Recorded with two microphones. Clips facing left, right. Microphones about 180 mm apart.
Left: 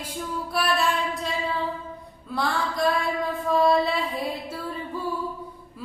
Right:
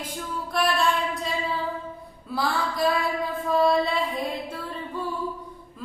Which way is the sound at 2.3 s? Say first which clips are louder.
Even; centre (ahead or behind).